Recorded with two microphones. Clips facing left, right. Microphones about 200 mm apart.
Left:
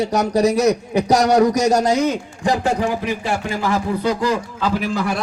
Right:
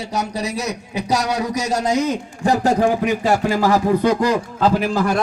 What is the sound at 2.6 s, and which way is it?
A man's voice, 45° right (ahead or behind).